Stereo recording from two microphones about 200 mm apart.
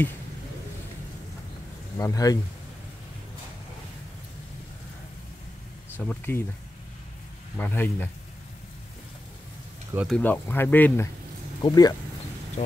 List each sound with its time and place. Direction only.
2.0 s speech: 15° left (ahead or behind)
5.9 s speech: 10° left (ahead or behind)
7.5 s speech: 10° left (ahead or behind)
9.9 s speech: 5° left (ahead or behind); by 11.9 s 20° left (ahead or behind)